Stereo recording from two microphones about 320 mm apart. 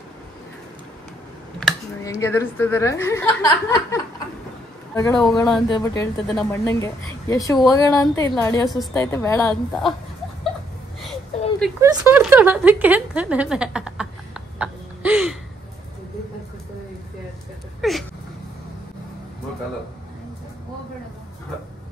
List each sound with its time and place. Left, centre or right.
1.6 s speech: centre
11.6 s speech: centre
17.8 s a sound: centre